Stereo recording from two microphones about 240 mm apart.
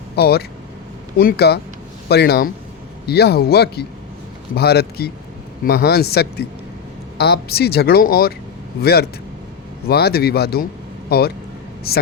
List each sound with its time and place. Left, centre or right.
0.2 s a man's voice: left